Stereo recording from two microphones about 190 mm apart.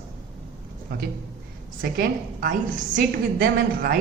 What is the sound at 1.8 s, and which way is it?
A woman's voice, 50° right (ahead or behind).